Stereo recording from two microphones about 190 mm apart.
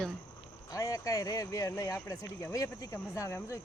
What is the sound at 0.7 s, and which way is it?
Speech, 15° left (ahead or behind).